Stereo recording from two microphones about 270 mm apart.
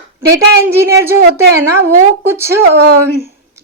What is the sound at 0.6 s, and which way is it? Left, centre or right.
Speech, centre.